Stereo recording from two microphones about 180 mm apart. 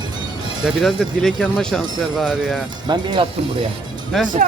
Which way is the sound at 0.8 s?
Centre (ahead or behind).